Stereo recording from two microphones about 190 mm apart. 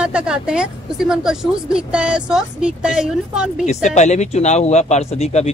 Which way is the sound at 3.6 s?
40° left (ahead or behind).